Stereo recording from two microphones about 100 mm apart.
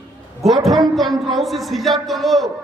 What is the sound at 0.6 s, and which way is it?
A man's voice, centre (ahead or behind).